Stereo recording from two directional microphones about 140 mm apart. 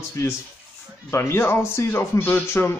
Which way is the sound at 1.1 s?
20° left (ahead or behind).